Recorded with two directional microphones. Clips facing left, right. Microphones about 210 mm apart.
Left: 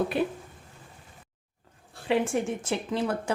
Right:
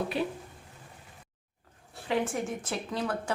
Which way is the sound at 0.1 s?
50° left (ahead or behind).